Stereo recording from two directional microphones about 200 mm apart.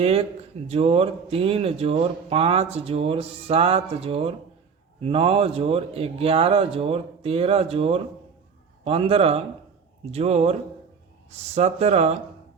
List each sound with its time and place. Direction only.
0.0 s speech: 30° right (ahead or behind)